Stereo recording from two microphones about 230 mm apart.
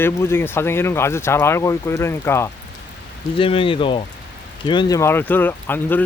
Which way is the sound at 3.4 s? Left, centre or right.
Left.